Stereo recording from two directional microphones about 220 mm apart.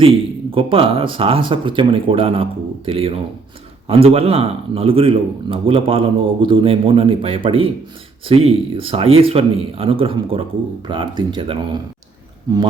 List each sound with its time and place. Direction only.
0.0 s speech: 25° right (ahead or behind)